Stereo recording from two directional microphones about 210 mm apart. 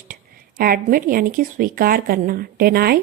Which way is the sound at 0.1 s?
45° right (ahead or behind).